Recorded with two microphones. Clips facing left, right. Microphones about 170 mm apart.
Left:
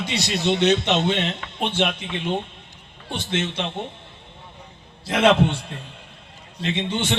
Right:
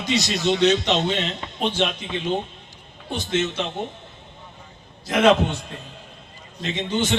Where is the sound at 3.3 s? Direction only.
30° left (ahead or behind).